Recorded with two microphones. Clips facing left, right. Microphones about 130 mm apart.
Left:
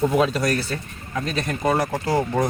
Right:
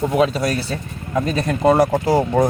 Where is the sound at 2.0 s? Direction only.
15° right (ahead or behind).